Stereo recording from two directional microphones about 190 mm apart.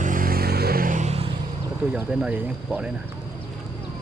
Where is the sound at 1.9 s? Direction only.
5° right (ahead or behind).